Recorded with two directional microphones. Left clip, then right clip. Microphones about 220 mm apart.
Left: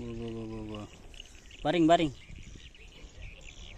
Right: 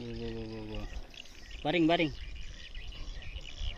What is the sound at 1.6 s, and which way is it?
Speech, 10° left (ahead or behind).